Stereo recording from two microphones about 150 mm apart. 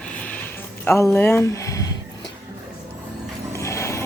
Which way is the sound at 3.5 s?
20° left (ahead or behind).